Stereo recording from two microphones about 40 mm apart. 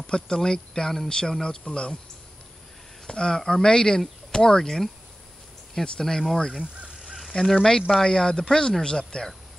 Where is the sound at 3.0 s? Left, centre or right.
Centre.